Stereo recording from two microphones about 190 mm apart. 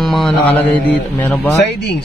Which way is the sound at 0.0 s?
Centre (ahead or behind).